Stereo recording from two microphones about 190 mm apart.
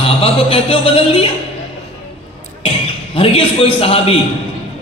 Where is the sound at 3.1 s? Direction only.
30° left (ahead or behind).